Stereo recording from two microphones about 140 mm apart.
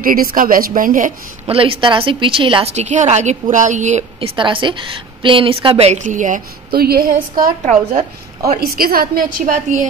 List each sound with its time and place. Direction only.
0.0 s a woman's voice: 90° right
1.5 s a woman's voice: 40° right (ahead or behind)
2.7 s a woman's voice: 55° right (ahead or behind)
4.2 s a woman's voice: 35° right (ahead or behind)
5.9 s a woman's voice: 65° right (ahead or behind)